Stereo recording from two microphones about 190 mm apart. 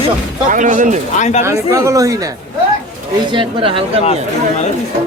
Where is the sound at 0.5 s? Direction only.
45° right (ahead or behind).